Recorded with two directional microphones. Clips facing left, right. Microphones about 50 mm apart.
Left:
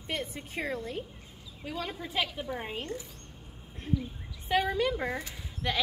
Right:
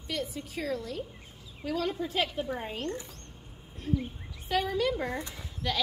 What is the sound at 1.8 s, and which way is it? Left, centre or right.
Speech, centre.